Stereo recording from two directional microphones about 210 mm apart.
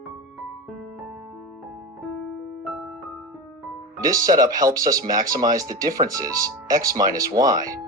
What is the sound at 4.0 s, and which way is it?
Speech, 15° right (ahead or behind).